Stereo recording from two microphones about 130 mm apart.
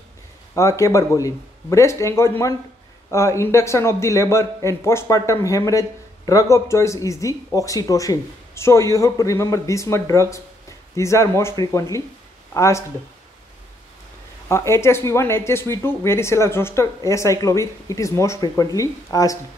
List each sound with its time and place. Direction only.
0.6 s a man's voice: 25° left (ahead or behind)
14.5 s a man's voice: 20° left (ahead or behind)